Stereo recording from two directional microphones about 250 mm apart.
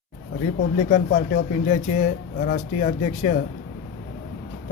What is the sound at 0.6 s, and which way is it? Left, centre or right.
Speech, left.